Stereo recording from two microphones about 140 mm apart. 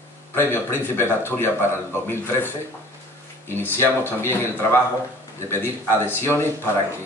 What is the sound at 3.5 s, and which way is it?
Speech, 15° left (ahead or behind).